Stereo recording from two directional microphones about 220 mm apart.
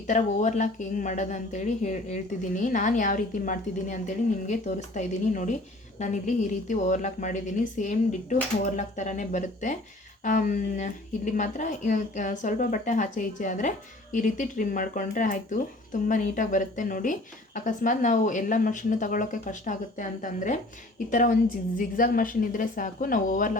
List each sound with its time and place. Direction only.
0.1 s speech: 35° left (ahead or behind)